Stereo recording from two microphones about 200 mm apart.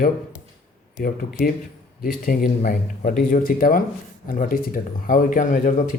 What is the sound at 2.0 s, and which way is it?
Speech, 45° left (ahead or behind).